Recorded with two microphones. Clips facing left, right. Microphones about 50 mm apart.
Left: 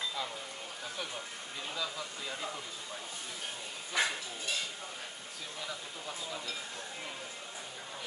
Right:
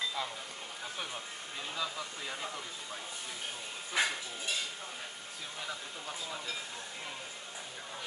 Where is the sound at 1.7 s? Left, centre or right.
Centre.